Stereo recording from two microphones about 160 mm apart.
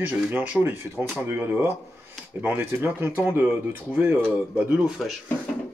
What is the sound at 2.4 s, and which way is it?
Speech, 15° right (ahead or behind).